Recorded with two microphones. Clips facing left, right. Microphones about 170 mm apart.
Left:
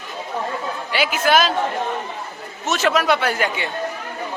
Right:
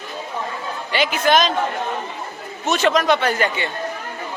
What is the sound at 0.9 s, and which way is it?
Speech, 5° left (ahead or behind).